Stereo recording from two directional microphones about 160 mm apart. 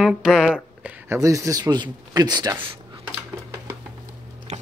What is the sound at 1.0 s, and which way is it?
Speech, 20° right (ahead or behind).